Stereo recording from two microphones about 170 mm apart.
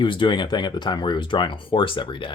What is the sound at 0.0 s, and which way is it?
Speech, 30° left (ahead or behind).